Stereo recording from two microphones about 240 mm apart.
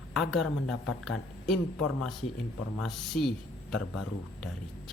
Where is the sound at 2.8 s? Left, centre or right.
Centre.